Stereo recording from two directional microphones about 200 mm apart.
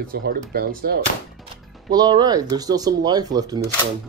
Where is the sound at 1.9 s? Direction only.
20° right (ahead or behind).